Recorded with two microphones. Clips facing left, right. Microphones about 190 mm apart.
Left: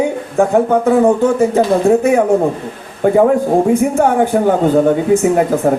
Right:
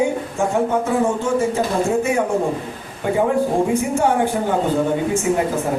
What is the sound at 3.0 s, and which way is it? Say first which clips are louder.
Speech: left 8 dB; 50° left (ahead or behind).